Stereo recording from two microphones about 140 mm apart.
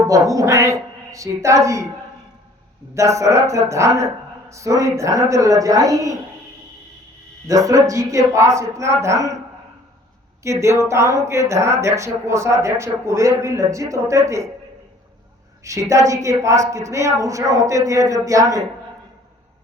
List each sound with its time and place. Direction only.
0.1 s speech: 25° right (ahead or behind)
2.9 s speech: 20° right (ahead or behind)
7.4 s speech: 25° right (ahead or behind)
10.4 s speech: 20° right (ahead or behind)
15.6 s speech: 20° right (ahead or behind)